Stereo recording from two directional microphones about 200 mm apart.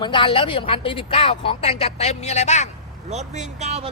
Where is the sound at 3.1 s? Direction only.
35° right (ahead or behind).